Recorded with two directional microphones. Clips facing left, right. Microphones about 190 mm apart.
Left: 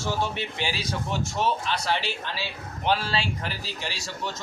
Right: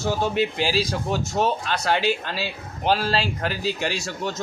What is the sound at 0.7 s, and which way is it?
Speech, 90° right.